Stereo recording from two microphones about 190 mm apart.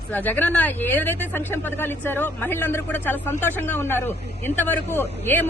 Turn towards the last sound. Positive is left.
turn(degrees=10)  # may be behind; listen again after turning